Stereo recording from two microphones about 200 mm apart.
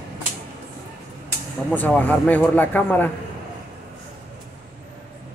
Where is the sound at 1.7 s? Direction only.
10° left (ahead or behind).